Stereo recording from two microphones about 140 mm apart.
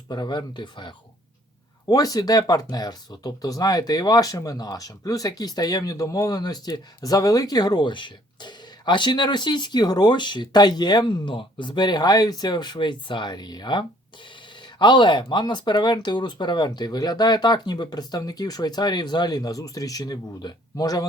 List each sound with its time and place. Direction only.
0.1 s speech: 30° left (ahead or behind)